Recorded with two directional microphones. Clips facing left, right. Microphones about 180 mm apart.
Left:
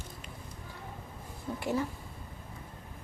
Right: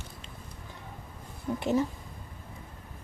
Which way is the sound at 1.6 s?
20° right (ahead or behind).